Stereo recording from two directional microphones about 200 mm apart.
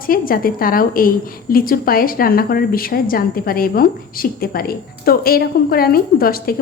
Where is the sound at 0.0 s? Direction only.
45° left (ahead or behind).